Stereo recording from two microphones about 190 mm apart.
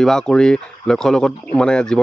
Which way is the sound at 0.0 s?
5° left (ahead or behind).